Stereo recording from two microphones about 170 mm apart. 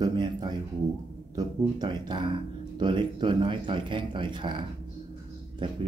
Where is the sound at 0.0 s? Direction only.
25° right (ahead or behind).